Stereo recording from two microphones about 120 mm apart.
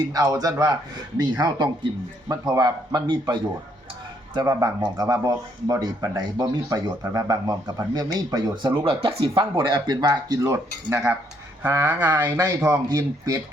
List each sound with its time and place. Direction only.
0.1 s speech: 30° right (ahead or behind)
4.4 s speech: 20° right (ahead or behind)
8.7 s speech: 50° right (ahead or behind); by 13.4 s 30° right (ahead or behind)